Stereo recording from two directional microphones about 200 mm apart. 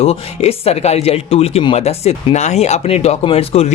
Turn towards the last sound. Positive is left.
turn(degrees=30)  # may be behind; listen again after turning